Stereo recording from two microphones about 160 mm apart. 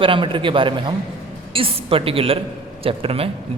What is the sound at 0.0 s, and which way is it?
A man's voice, 35° right (ahead or behind).